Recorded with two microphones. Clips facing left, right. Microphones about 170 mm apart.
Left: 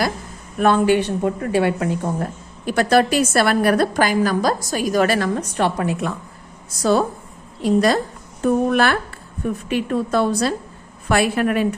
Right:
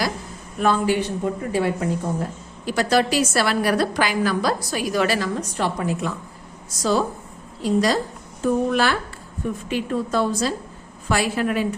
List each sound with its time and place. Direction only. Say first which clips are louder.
0.6 s speech: left 4 dB; 65° left (ahead or behind)
2.6 s a woman's voice: left 3 dB; 55° left (ahead or behind)